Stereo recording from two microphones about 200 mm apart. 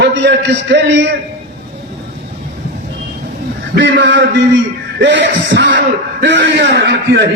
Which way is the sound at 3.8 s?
60° right (ahead or behind).